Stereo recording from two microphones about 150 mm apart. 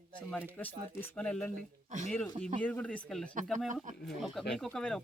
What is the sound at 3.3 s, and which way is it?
Speech, 60° right (ahead or behind).